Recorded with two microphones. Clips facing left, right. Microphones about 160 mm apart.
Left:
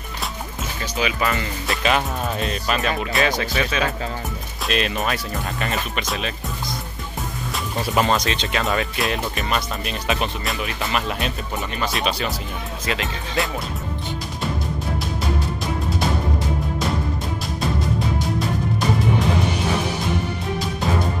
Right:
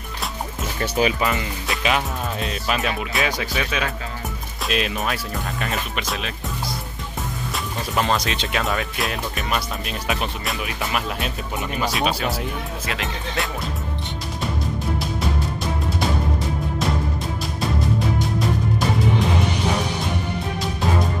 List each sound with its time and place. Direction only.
1.2 s speech: 20° right (ahead or behind)
1.7 s speech: centre (ahead or behind)
7.5 s speech: centre (ahead or behind)